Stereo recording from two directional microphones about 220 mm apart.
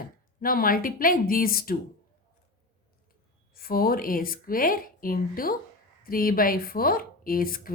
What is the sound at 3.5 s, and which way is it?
Speech, 40° left (ahead or behind).